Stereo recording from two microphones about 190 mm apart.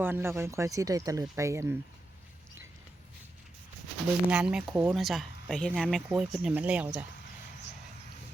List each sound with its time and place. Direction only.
0.0 s speech: 10° right (ahead or behind)
4.3 s speech: 5° right (ahead or behind)
4.9 s speech: centre (ahead or behind)